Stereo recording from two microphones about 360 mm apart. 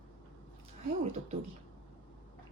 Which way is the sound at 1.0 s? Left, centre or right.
Centre.